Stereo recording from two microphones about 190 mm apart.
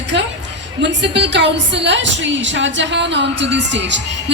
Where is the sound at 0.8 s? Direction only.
70° right (ahead or behind).